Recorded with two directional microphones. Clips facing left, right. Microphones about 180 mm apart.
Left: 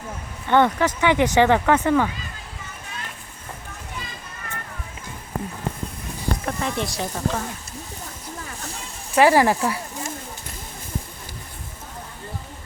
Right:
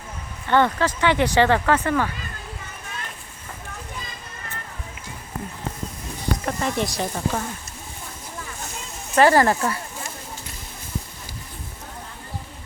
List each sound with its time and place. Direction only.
0.4 s speech: 15° left (ahead or behind)
6.4 s a sound: centre (ahead or behind)
6.9 s speech: centre (ahead or behind)
9.1 s speech: 10° left (ahead or behind)